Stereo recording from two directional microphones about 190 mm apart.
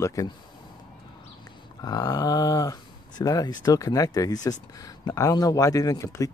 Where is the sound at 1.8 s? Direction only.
20° left (ahead or behind).